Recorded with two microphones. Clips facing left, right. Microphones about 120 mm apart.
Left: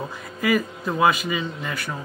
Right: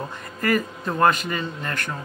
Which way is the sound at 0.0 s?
5° left (ahead or behind).